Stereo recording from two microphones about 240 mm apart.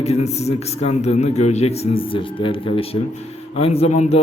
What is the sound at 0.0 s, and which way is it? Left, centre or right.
A man's voice, left.